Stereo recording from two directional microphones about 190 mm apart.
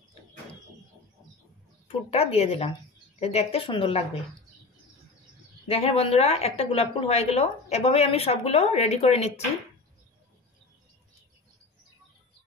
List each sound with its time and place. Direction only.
1.9 s a woman's voice: 30° left (ahead or behind)
5.7 s a woman's voice: 30° left (ahead or behind)